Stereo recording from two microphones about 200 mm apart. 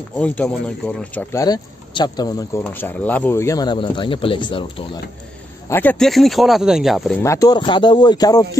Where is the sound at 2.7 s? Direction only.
10° left (ahead or behind); by 5.0 s 25° left (ahead or behind).